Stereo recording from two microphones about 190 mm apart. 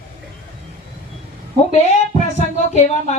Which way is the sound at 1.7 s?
35° left (ahead or behind).